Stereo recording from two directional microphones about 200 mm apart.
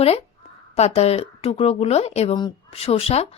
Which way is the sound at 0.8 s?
30° left (ahead or behind).